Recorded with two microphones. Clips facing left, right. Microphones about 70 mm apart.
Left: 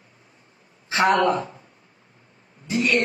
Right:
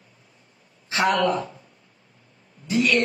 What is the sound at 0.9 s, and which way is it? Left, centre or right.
Speech, left.